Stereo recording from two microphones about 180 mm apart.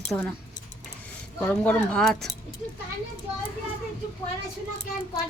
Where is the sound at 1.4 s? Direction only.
10° left (ahead or behind).